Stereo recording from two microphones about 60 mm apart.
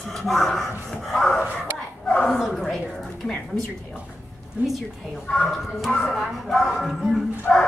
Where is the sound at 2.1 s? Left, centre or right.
Centre.